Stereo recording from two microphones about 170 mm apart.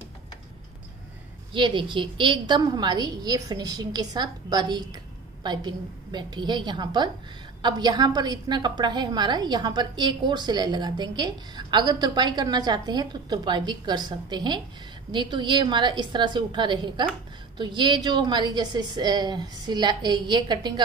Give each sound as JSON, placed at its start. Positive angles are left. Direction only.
{"t": 1.5, "sound": "a woman's voice", "side_deg": -30}